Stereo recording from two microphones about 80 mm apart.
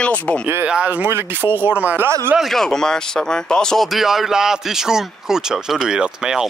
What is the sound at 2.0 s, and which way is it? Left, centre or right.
Speech, right.